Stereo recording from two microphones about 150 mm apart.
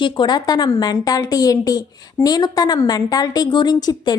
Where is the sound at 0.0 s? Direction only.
30° left (ahead or behind).